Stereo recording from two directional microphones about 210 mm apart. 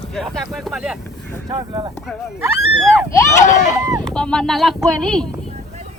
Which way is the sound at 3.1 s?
15° left (ahead or behind).